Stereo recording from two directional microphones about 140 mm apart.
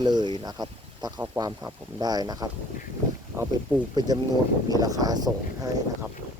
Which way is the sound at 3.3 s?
20° right (ahead or behind).